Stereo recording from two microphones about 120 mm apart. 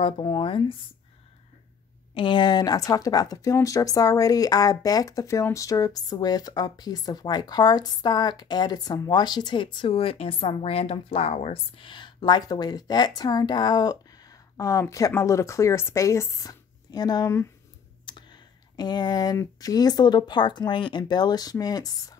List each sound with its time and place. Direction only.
0.0 s speech: 45° left (ahead or behind)
2.1 s speech: 40° left (ahead or behind)
18.0 s a sound: 40° left (ahead or behind)
19.3 s speech: 30° left (ahead or behind)